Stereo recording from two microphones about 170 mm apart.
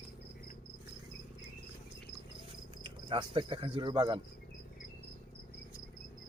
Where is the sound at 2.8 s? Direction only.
30° right (ahead or behind).